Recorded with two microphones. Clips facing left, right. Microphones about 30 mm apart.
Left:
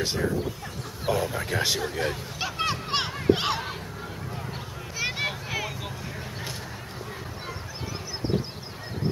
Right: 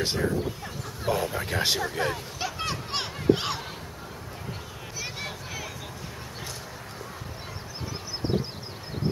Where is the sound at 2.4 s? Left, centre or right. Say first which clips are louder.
Left 4 dB; centre.